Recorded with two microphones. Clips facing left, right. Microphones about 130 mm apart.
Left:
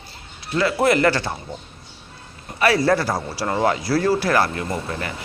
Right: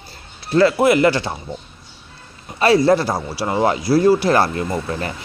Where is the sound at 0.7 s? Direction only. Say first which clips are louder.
Right 3 dB; 15° right (ahead or behind).